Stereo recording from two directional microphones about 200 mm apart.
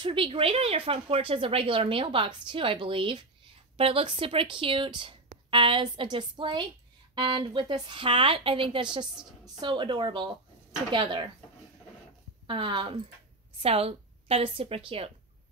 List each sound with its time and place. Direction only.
0.0 s speech: 25° right (ahead or behind)
12.4 s a woman's voice: 25° right (ahead or behind)